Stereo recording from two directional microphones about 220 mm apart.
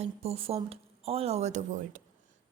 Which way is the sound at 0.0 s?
25° right (ahead or behind).